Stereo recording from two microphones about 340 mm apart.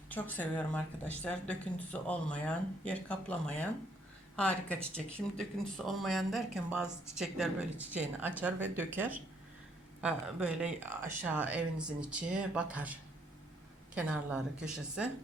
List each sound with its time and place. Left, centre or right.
0.1 s speech: centre